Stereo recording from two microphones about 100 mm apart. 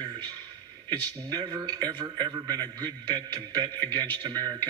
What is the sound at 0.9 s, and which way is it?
A man's voice, 45° right (ahead or behind).